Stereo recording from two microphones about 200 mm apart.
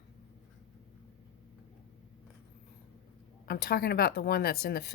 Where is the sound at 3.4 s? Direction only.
50° left (ahead or behind).